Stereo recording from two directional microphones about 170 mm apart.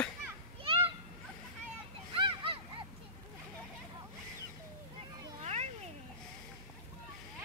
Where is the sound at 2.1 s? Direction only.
30° right (ahead or behind).